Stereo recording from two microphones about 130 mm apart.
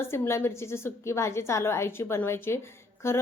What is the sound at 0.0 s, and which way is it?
A woman's voice, 20° left (ahead or behind).